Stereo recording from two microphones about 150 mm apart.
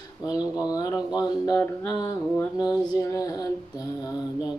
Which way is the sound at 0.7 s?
25° left (ahead or behind).